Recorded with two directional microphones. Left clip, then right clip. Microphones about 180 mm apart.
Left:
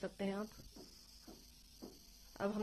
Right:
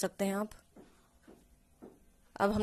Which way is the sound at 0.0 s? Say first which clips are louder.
Right 9 dB; 40° right (ahead or behind).